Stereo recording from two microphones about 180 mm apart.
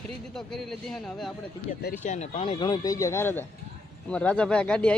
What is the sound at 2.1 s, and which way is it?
Speech, 40° left (ahead or behind).